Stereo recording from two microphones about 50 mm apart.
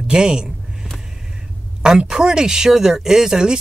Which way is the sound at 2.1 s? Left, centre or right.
Centre.